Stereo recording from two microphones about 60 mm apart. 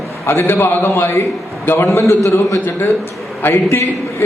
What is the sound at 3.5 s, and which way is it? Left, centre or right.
Speech, left.